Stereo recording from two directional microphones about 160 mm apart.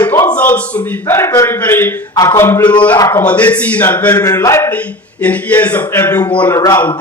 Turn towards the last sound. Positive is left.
turn(degrees=20)  # may be behind; listen again after turning